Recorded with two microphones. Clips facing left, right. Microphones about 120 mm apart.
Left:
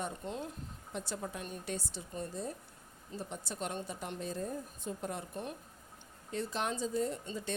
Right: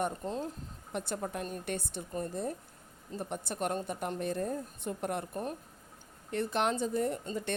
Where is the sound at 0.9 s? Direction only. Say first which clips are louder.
Right 5 dB; 55° right (ahead or behind).